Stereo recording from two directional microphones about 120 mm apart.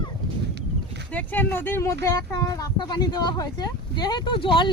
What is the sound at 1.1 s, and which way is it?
Speech, 15° left (ahead or behind).